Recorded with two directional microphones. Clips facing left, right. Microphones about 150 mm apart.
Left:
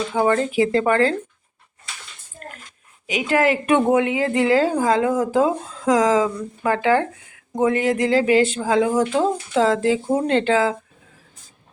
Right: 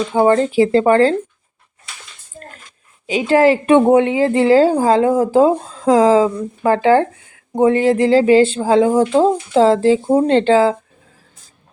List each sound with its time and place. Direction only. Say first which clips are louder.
0.1 s a woman's voice: right 6 dB; 30° right (ahead or behind)
3.1 s a woman's voice: right 6 dB; 30° right (ahead or behind)